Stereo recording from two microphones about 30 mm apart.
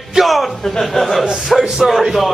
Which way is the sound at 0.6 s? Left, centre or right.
Centre.